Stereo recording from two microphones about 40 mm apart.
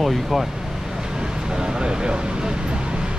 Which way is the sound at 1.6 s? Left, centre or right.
Centre.